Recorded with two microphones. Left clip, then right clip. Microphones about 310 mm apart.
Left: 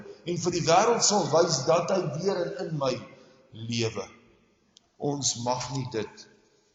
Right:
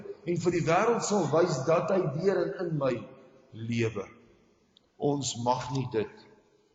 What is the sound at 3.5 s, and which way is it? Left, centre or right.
Speech, centre.